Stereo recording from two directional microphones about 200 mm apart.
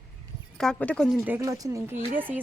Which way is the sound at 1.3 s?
15° right (ahead or behind).